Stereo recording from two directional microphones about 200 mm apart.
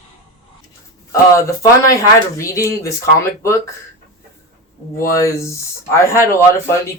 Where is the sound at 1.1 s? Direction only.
15° left (ahead or behind).